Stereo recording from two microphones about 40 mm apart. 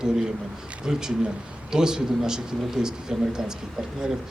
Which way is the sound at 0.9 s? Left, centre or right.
Centre.